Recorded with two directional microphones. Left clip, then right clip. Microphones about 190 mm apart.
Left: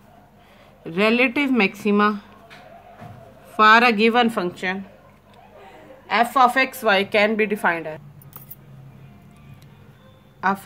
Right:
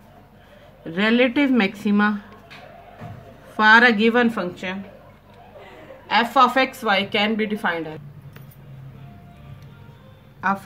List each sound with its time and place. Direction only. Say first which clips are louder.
0.9 s a woman's voice: even; 40° left (ahead or behind)
3.5 s a woman's voice: even; 35° left (ahead or behind)
6.0 s a woman's voice: even; 30° left (ahead or behind)